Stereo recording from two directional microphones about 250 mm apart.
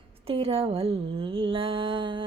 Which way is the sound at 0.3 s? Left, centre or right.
Right.